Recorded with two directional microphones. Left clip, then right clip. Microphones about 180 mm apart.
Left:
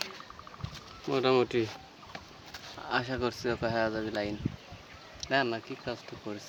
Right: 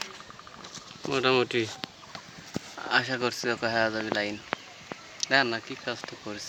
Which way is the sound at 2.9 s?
Centre (ahead or behind).